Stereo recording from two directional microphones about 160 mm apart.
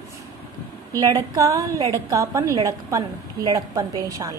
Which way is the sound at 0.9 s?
20° right (ahead or behind).